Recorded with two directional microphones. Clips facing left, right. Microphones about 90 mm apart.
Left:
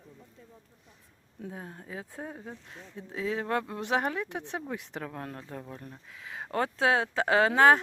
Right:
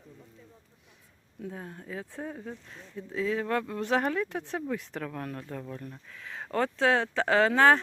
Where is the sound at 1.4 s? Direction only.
25° left (ahead or behind).